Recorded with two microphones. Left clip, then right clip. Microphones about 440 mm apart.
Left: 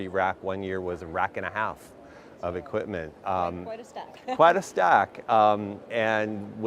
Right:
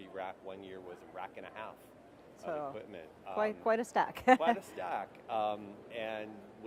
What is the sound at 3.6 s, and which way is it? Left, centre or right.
Speech, right.